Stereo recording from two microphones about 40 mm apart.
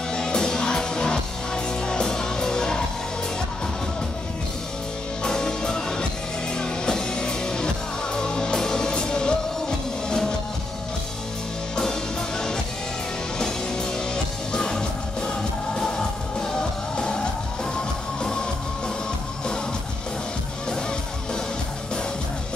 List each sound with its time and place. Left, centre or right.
0.1 s music: centre
5.2 s music: centre
11.7 s music: centre